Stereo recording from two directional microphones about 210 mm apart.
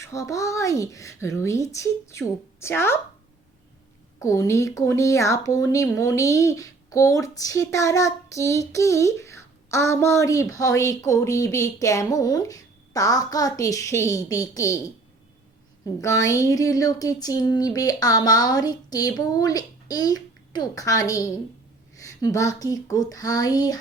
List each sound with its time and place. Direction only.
0.0 s speech: 15° left (ahead or behind)
4.2 s speech: 15° left (ahead or behind)
16.0 s speech: 15° left (ahead or behind)